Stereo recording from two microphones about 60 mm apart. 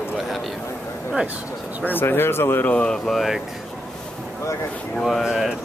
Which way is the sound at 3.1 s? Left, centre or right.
Centre.